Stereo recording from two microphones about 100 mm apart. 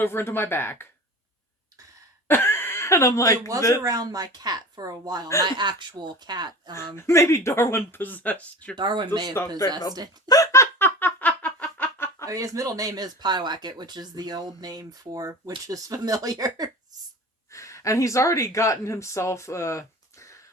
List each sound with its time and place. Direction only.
0.0 s speech: 25° left (ahead or behind)
2.2 s speech: 20° left (ahead or behind)
3.8 s speech: 40° right (ahead or behind)
6.9 s speech: 25° left (ahead or behind)
8.7 s speech: 50° right (ahead or behind)
10.2 s music: 35° left (ahead or behind); by 12.1 s 20° left (ahead or behind)
12.2 s speech: 35° right (ahead or behind)
17.5 s speech: 30° left (ahead or behind)